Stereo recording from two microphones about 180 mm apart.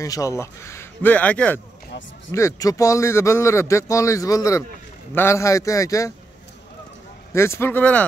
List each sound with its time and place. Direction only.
0.0 s speech: 20° left (ahead or behind)
7.3 s speech: 15° left (ahead or behind)